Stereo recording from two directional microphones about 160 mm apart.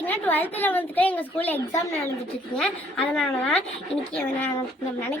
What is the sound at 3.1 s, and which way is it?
Speech, centre (ahead or behind).